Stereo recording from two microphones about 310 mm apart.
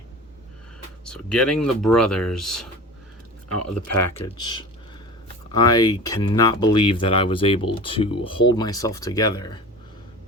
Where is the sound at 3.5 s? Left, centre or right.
Left.